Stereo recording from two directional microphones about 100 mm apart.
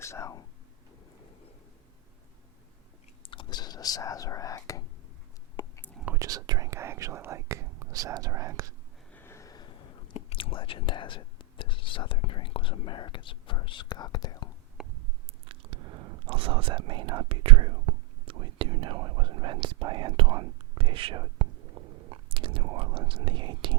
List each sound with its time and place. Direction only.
0.0 s speech: 30° left (ahead or behind)
3.2 s speech: 50° left (ahead or behind); by 4.8 s 35° left (ahead or behind)
5.6 s whispering: 45° left (ahead or behind)
6.1 s speech: 35° right (ahead or behind)
9.1 s a sound: 25° left (ahead or behind)
10.2 s speech: 75° left (ahead or behind); by 14.5 s 45° left (ahead or behind)
14.8 s a sound: 5° right (ahead or behind)
15.5 s biting: 70° right (ahead or behind)
16.2 s speech: 60° right (ahead or behind)
17.2 s speech: 70° right (ahead or behind)
21.8 s biting: 70° right (ahead or behind)
22.1 s speech: 60° right (ahead or behind)